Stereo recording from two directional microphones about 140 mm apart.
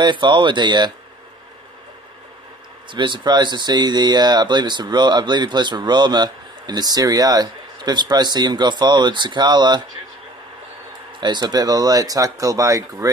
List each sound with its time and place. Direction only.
0.0 s speech: 35° right (ahead or behind)
2.9 s speech: 35° right (ahead or behind)
11.1 s speech: 30° right (ahead or behind)